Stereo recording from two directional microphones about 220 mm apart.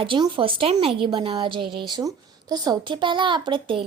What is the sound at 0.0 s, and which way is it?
A woman's voice, 20° right (ahead or behind).